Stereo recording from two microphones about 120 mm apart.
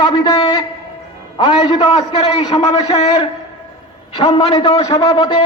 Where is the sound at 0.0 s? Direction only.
40° left (ahead or behind).